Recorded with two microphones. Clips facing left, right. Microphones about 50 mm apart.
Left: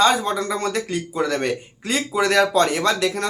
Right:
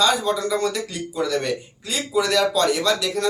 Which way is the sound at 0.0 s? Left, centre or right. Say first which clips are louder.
Left 2 dB; left.